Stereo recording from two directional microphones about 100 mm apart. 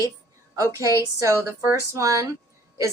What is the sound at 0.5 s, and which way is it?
Speech, 30° right (ahead or behind).